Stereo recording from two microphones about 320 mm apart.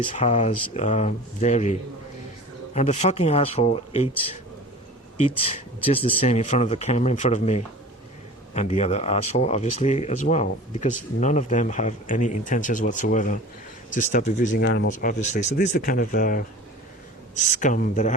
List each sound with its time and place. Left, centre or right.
0.1 s speech: left
5.2 s speech: centre